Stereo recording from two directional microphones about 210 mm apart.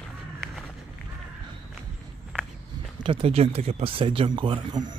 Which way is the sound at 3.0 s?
25° right (ahead or behind).